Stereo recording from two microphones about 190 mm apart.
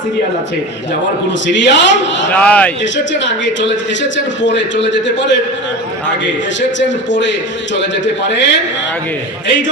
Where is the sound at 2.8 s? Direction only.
70° left (ahead or behind).